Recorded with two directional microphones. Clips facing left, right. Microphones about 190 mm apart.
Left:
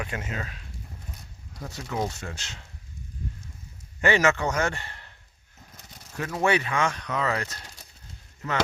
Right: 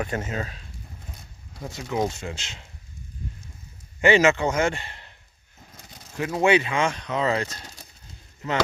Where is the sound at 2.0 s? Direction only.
20° right (ahead or behind).